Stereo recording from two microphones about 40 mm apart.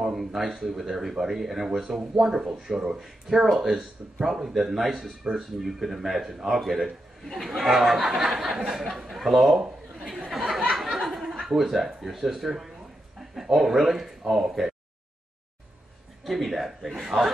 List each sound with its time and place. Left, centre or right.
0.0 s speech: centre
1.7 s a man's voice: centre
10.3 s a sound: centre
11.4 s speech: centre
16.3 s speech: centre